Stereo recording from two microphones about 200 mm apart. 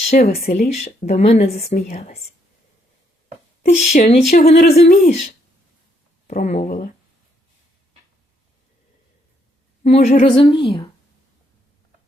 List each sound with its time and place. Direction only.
0.1 s speech: 35° left (ahead or behind)
3.7 s speech: 35° left (ahead or behind)
9.8 s a woman's voice: 35° left (ahead or behind)